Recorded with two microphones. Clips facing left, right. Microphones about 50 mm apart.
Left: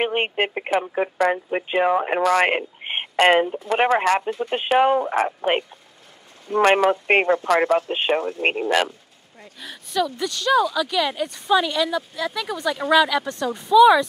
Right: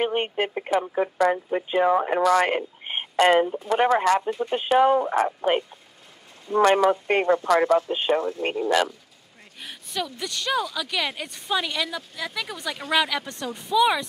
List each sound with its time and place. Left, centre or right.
0.0 s speech: left
4.3 s speech: left
6.6 s speech: left
7.9 s speech: left
10.0 s speech: left
11.4 s speech: left
12.4 s speech: left
12.9 s speech: left
13.2 s speech: left
13.7 s speech: left